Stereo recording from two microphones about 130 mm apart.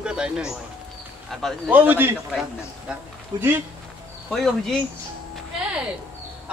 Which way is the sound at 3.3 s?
30° right (ahead or behind).